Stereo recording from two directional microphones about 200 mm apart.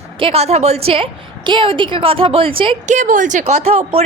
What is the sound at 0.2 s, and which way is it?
A woman's voice, 30° right (ahead or behind).